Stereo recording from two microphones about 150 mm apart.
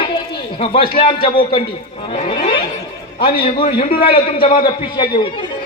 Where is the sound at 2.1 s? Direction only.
35° left (ahead or behind).